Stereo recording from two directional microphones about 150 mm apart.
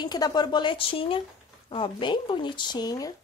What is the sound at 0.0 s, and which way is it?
Speech, 25° left (ahead or behind).